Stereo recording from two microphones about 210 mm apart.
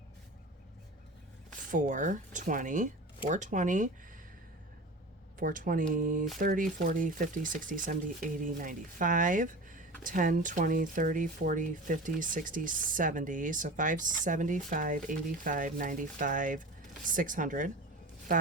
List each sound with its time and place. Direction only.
1.7 s speech: 40° right (ahead or behind)
5.4 s speech: 40° right (ahead or behind)